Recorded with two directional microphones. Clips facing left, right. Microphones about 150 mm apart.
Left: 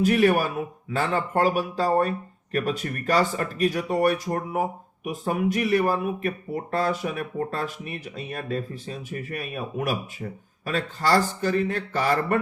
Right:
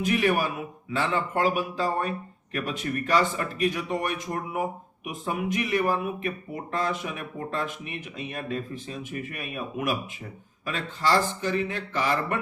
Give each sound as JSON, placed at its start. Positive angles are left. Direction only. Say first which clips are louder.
{"t": 0.0, "sound": "speech", "louder": "left 4 dB", "side_deg": 40}